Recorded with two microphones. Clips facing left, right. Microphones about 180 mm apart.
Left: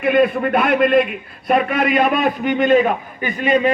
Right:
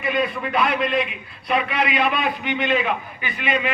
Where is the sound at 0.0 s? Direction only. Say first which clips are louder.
Left 8 dB; 55° left (ahead or behind).